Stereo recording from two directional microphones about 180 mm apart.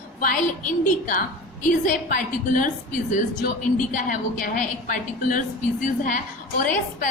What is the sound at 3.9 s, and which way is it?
A woman's voice, 50° left (ahead or behind).